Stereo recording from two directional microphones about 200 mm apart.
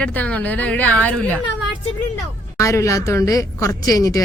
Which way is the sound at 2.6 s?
15° left (ahead or behind).